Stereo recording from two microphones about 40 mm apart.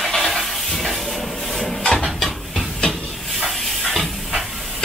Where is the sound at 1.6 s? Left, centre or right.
Left.